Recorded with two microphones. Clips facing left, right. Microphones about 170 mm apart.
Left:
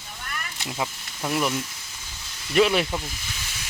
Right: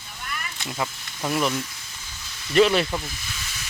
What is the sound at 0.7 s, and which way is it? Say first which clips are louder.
Speech: even; 5° left (ahead or behind).